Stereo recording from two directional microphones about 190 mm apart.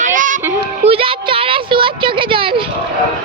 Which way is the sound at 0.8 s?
30° right (ahead or behind).